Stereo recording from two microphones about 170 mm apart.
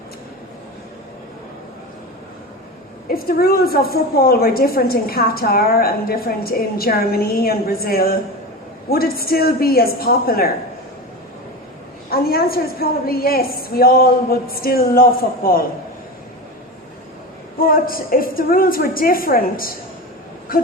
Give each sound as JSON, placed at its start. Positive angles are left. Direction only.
{"t": 3.1, "sound": "a woman's voice", "side_deg": 60}
{"t": 12.1, "sound": "a woman's voice", "side_deg": 60}
{"t": 17.6, "sound": "a woman's voice", "side_deg": 55}